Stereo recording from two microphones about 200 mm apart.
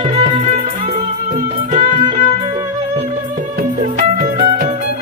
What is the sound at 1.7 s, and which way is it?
Music, 40° right (ahead or behind).